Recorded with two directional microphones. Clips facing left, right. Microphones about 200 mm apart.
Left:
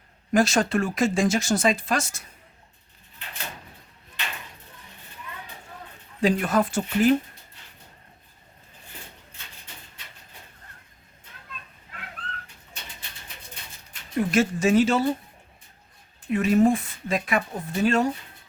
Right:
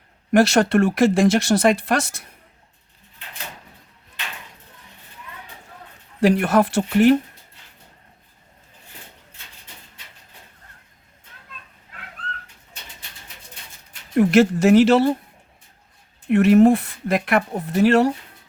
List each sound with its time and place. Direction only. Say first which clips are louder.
0.3 s speech: right 5 dB; 65° right (ahead or behind)
6.1 s speech: right 5 dB; 70° right (ahead or behind)
14.2 s speech: right 7 dB; 65° right (ahead or behind)
16.3 s speech: right 6 dB; 70° right (ahead or behind)